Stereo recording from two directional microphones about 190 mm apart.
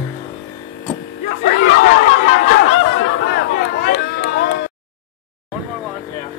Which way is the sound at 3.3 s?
55° left (ahead or behind).